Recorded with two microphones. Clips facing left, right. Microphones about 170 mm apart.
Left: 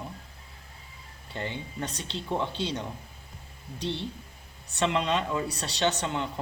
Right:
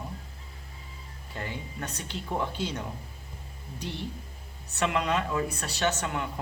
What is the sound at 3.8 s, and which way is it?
Speech, 25° left (ahead or behind).